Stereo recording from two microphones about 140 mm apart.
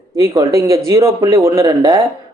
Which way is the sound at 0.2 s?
25° right (ahead or behind).